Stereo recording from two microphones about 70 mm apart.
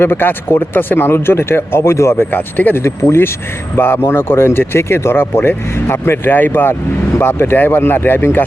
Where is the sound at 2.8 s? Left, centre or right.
Left.